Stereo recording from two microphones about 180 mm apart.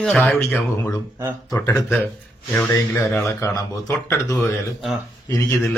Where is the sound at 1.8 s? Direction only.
5° left (ahead or behind).